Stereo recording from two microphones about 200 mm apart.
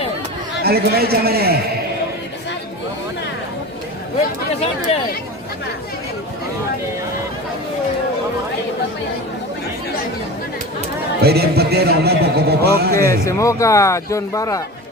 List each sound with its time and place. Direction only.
0.6 s a man's voice: 50° right (ahead or behind)
11.2 s a man's voice: 50° right (ahead or behind)
13.0 s a man's voice: 15° left (ahead or behind)